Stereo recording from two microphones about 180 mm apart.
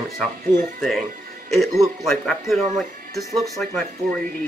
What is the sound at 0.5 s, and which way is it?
Speech, 20° right (ahead or behind).